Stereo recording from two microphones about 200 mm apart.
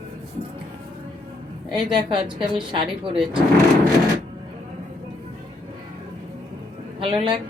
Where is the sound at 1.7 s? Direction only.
25° right (ahead or behind).